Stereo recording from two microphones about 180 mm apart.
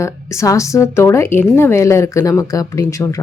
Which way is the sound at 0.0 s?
15° left (ahead or behind).